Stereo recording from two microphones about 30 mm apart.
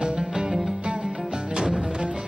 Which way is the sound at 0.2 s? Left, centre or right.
Centre.